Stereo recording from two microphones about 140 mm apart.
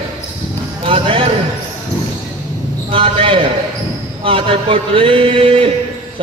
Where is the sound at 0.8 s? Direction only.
40° right (ahead or behind).